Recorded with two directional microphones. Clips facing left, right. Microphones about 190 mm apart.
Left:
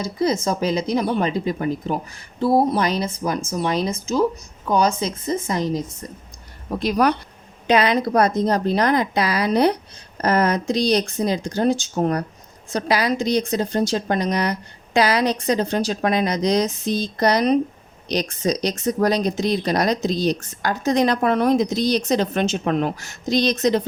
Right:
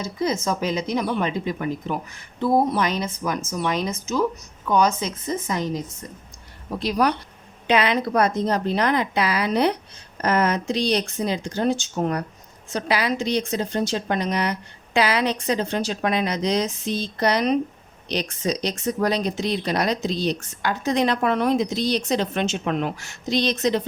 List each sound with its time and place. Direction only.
0.0 s speech: 35° left (ahead or behind)
6.7 s speech: 50° left (ahead or behind)
7.7 s speech: 40° left (ahead or behind)